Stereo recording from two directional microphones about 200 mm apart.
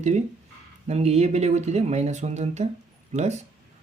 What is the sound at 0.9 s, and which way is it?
Speech, 35° right (ahead or behind).